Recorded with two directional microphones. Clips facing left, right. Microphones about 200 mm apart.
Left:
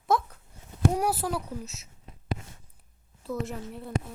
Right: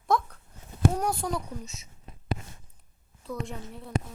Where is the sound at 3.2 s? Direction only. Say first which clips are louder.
Left 3 dB; 5° left (ahead or behind).